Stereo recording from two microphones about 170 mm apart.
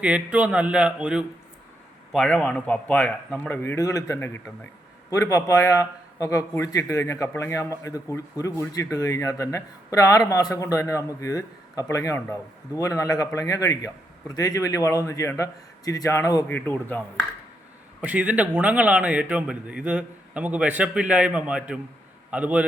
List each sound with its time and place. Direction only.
0.0 s a man's voice: 5° right (ahead or behind)
2.1 s a man's voice: 5° left (ahead or behind)
18.0 s a man's voice: 10° right (ahead or behind)